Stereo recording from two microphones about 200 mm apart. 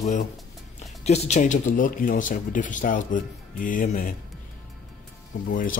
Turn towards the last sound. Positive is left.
turn(degrees=45)  # may be behind; listen again after turning